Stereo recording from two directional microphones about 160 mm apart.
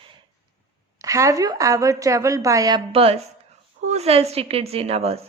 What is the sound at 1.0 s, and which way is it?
A woman's voice, 20° right (ahead or behind).